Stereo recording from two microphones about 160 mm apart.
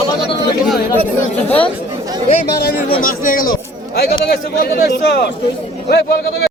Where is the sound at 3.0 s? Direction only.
60° left (ahead or behind).